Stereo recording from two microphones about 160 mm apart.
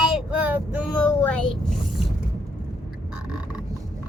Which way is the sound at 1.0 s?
10° left (ahead or behind).